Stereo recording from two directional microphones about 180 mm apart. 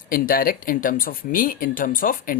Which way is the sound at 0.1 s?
55° left (ahead or behind).